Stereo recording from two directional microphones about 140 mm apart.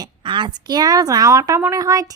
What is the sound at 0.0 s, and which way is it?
Speech, 35° right (ahead or behind).